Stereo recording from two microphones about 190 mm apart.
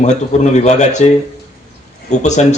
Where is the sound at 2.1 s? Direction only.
40° left (ahead or behind).